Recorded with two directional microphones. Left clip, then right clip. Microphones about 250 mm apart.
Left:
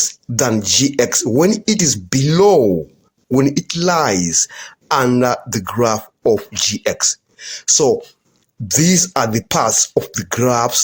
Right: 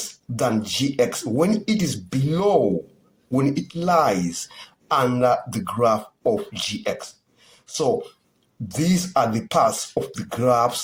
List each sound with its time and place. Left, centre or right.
0.3 s speech: left